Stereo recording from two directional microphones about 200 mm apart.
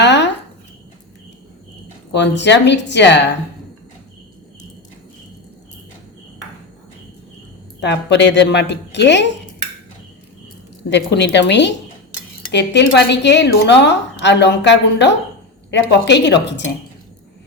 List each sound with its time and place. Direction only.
0.0 s a sound: 60° left (ahead or behind)
2.1 s speech: 60° left (ahead or behind)
7.8 s speech: 60° left (ahead or behind)
10.8 s speech: 60° left (ahead or behind)